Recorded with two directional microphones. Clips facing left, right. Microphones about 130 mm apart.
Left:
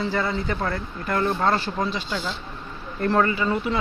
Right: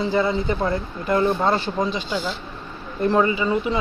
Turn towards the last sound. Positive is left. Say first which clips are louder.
# right 2 dB
turn(degrees=-15)  # may be behind; listen again after turning